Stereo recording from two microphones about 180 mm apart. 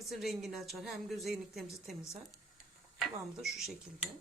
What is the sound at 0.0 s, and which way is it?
A woman's voice, centre (ahead or behind).